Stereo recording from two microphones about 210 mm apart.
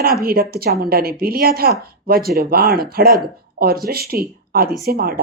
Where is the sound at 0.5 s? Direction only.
45° right (ahead or behind).